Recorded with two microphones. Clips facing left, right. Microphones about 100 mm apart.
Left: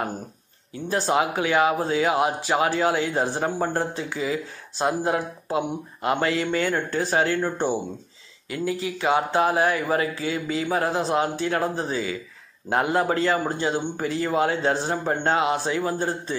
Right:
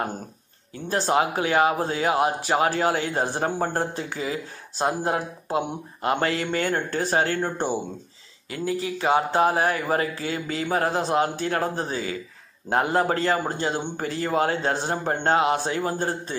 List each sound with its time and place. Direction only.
0.8 s speech: 40° right (ahead or behind)
8.5 s speech: 35° right (ahead or behind)
12.6 s speech: 35° right (ahead or behind)